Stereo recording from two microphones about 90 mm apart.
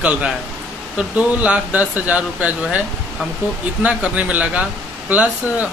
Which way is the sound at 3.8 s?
15° right (ahead or behind).